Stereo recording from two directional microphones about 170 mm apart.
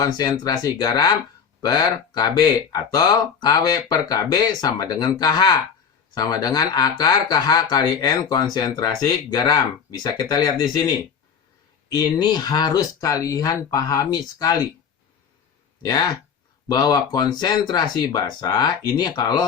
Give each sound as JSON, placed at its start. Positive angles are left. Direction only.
{"t": 0.0, "sound": "speech", "side_deg": 25}
{"t": 11.9, "sound": "speech", "side_deg": 25}
{"t": 15.8, "sound": "speech", "side_deg": 25}